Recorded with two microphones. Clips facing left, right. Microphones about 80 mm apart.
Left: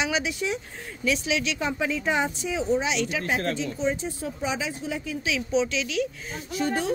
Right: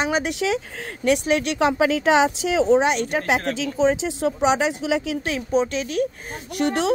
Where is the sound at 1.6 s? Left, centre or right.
Right.